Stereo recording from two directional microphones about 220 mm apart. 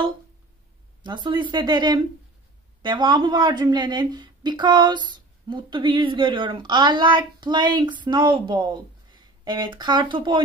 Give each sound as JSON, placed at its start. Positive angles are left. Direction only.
{"t": 1.0, "sound": "speech", "side_deg": -20}